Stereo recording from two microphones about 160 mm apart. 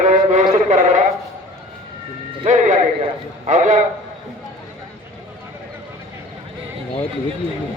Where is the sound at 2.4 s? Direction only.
50° right (ahead or behind).